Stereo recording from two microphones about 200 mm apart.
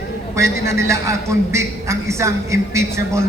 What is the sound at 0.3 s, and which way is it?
A man's voice, 15° right (ahead or behind).